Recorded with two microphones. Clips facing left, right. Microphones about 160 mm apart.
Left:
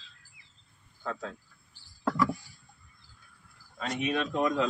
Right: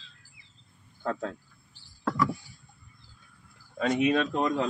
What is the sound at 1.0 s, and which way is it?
Cricket, 50° right (ahead or behind).